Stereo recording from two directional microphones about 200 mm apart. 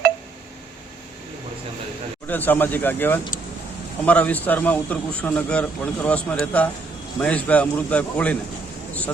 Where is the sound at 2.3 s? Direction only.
10° left (ahead or behind).